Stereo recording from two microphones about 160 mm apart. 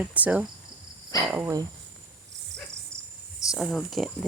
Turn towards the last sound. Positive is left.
turn(degrees=0)  # may be behind; listen again after turning